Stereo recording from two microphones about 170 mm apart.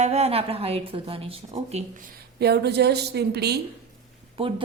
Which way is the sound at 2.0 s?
75° right (ahead or behind).